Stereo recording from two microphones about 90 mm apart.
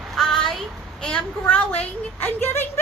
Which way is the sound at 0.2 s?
5° left (ahead or behind).